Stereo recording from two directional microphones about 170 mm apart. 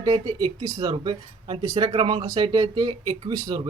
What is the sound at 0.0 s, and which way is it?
Speech, 25° right (ahead or behind).